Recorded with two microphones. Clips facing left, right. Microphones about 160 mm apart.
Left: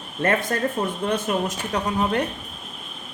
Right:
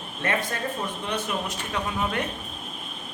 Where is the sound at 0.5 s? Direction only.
45° left (ahead or behind).